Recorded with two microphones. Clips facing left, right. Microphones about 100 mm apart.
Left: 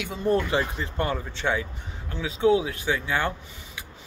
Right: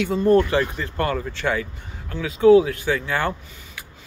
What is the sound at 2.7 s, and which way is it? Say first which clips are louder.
Speech: right 4 dB; 10° left (ahead or behind).